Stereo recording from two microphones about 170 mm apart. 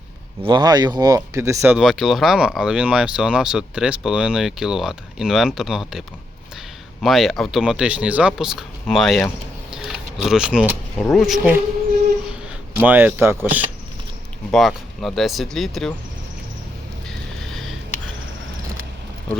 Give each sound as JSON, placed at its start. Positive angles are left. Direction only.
{"t": 0.4, "sound": "speech", "side_deg": -25}
{"t": 9.7, "sound": "a sound", "side_deg": 0}
{"t": 11.1, "sound": "speech", "side_deg": 0}
{"t": 12.7, "sound": "speech", "side_deg": -10}
{"t": 14.5, "sound": "speech", "side_deg": 0}
{"t": 17.4, "sound": "a sound", "side_deg": 0}